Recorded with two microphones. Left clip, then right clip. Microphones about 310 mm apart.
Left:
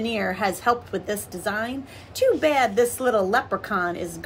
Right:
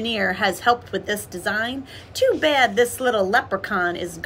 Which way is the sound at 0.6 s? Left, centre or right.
Left.